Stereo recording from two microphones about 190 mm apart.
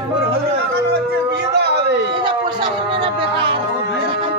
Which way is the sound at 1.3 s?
60° right (ahead or behind).